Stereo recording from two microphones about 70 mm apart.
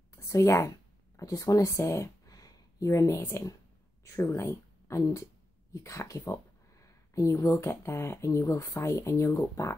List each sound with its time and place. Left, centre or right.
0.1 s a sound: left
2.9 s speech: left
3.2 s speech: left
4.0 s speech: left
5.7 s a sound: left
7.6 s speech: left